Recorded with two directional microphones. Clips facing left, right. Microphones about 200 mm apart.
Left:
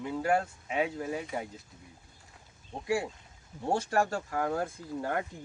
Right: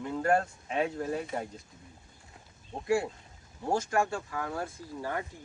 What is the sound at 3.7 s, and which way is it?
Speech, 35° left (ahead or behind).